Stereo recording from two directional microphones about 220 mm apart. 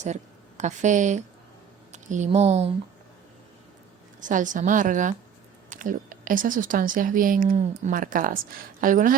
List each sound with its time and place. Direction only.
0.0 s a woman's voice: 30° right (ahead or behind)
4.2 s speech: 35° right (ahead or behind)